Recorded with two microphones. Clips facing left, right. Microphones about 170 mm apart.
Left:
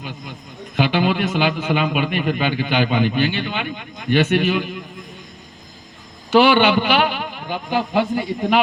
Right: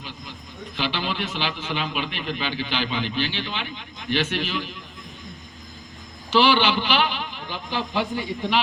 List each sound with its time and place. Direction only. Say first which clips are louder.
0.8 s a man's voice: left 9 dB; 55° left (ahead or behind)
6.6 s a man's voice: left 6 dB; 60° left (ahead or behind)